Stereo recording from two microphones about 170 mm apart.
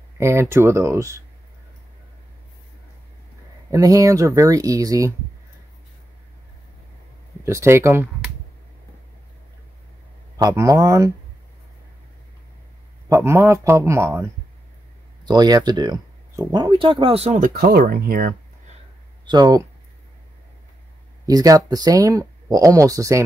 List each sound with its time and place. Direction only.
0.2 s speech: 15° right (ahead or behind)
3.7 s speech: 20° right (ahead or behind)
7.4 s speech: 15° right (ahead or behind)
10.3 s speech: 15° right (ahead or behind)
13.1 s speech: 15° right (ahead or behind)
15.2 s speech: 25° right (ahead or behind)
17.4 s speech: 60° right (ahead or behind)
19.2 s speech: 25° right (ahead or behind)
21.3 s speech: 20° right (ahead or behind)